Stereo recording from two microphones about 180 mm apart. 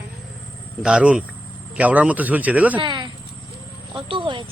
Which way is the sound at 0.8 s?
5° right (ahead or behind).